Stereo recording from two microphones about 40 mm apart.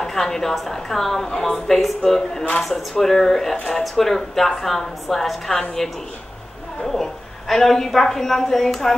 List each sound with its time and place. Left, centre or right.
0.0 s a woman's voice: centre
6.8 s a woman's voice: centre